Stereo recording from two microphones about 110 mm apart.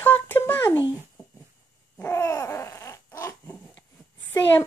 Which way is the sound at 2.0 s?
25° left (ahead or behind).